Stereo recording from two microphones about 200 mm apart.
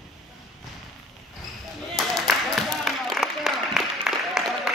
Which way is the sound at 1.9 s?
Centre (ahead or behind).